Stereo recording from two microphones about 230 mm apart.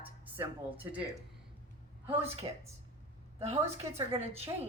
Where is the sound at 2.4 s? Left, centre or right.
Centre.